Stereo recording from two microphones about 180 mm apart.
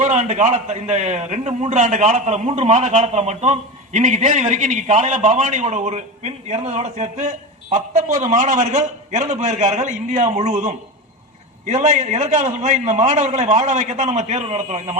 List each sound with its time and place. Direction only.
0.0 s a man's voice: 40° right (ahead or behind)